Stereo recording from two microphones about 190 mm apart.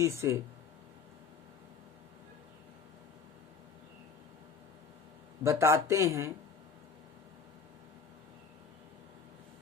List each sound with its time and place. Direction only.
0.0 s speech: 15° right (ahead or behind)
5.4 s speech: 15° right (ahead or behind)